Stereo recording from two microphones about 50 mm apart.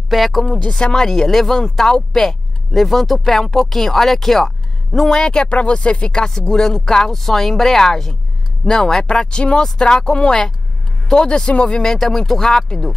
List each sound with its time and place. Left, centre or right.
0.1 s speech: centre
0.5 s speech: left; by 5.2 s centre
5.2 s speech: centre